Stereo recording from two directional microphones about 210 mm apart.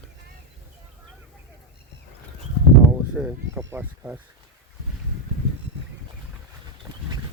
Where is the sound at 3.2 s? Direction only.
10° right (ahead or behind).